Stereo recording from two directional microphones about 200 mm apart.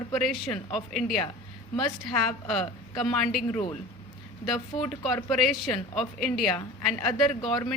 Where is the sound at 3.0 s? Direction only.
Centre (ahead or behind).